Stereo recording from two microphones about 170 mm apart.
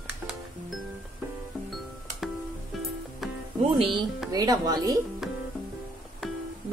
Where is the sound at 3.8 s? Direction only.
30° right (ahead or behind).